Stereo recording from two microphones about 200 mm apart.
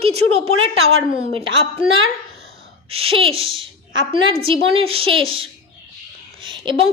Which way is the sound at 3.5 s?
25° right (ahead or behind).